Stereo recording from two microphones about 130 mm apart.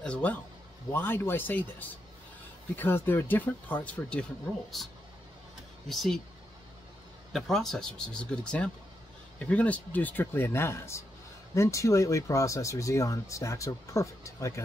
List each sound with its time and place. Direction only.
0.0 s a man's voice: 10° left (ahead or behind)
5.9 s speech: centre (ahead or behind)
7.3 s speech: centre (ahead or behind); by 14.6 s 25° left (ahead or behind)